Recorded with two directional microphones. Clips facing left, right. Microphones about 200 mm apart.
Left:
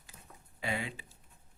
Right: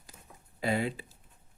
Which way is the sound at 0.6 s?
40° right (ahead or behind).